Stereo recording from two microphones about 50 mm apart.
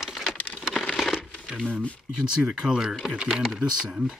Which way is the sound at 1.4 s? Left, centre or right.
Centre.